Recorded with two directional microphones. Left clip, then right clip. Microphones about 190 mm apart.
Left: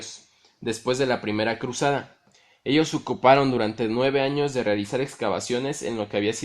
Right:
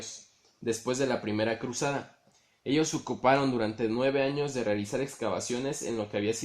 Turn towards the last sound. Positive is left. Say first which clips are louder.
# left 5 dB
turn(degrees=40)  # may be behind; listen again after turning